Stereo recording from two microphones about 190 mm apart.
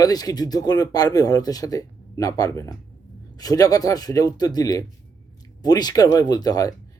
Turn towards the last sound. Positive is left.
turn(degrees=20)  # may be behind; listen again after turning